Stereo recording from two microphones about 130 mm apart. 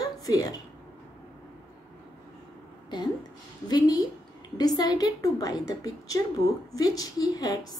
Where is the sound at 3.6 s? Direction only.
30° left (ahead or behind).